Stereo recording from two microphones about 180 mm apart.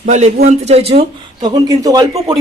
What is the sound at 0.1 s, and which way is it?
A man's voice, 40° right (ahead or behind).